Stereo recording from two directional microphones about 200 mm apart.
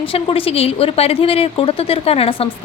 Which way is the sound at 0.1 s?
25° left (ahead or behind).